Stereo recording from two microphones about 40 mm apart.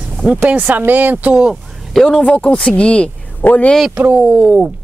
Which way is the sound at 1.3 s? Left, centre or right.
Right.